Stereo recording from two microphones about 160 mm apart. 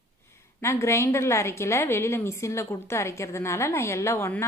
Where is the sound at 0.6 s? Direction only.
15° left (ahead or behind).